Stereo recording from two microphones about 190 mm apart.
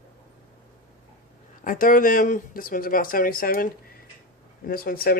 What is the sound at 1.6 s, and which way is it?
Speech, 45° left (ahead or behind).